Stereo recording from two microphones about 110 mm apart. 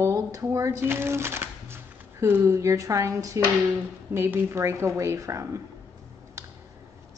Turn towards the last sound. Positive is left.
turn(degrees=-30)  # may be behind; listen again after turning